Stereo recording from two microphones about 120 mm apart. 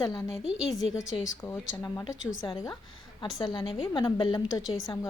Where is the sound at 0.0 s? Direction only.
30° left (ahead or behind).